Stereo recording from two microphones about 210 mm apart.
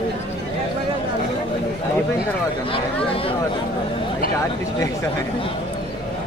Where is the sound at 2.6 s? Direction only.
25° left (ahead or behind).